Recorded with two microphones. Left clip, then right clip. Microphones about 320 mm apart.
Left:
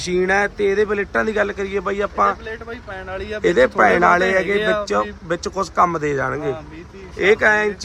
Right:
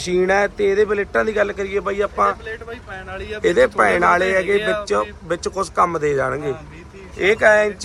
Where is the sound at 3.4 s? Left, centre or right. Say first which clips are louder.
Left 1 dB; centre.